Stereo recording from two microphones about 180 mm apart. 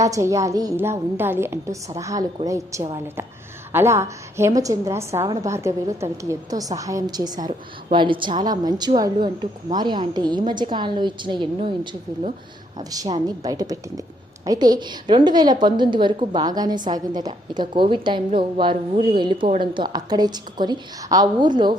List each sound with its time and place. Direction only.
0.0 s a woman's voice: 15° right (ahead or behind)